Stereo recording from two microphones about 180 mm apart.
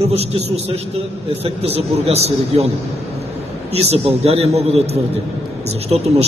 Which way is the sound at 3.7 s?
35° right (ahead or behind).